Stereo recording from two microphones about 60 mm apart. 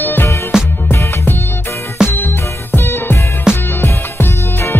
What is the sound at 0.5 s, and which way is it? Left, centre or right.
Music, centre.